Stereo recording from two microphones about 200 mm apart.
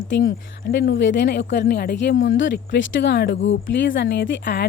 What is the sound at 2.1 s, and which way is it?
Speech, 70° left (ahead or behind).